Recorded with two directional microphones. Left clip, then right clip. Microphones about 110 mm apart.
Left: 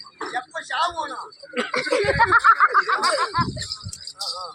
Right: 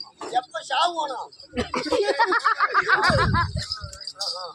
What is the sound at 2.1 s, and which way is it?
Snicker, 20° right (ahead or behind).